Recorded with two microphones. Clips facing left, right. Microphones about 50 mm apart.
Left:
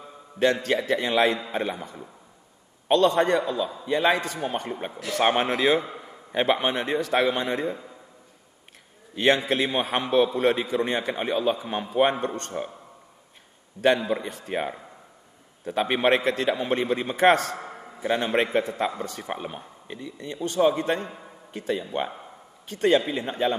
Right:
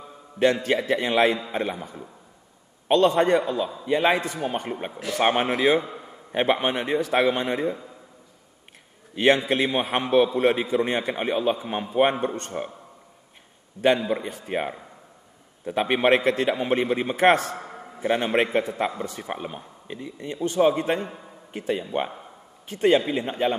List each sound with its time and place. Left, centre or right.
0.7 s a man's voice: centre
1.4 s a man's voice: centre
2.9 s a man's voice: centre
5.2 s a man's voice: centre
9.1 s a man's voice: centre
13.7 s a man's voice: centre
14.0 s a man's voice: centre
19.2 s a man's voice: centre
20.0 s a man's voice: centre